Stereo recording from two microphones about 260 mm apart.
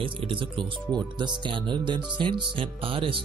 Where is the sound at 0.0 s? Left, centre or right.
Centre.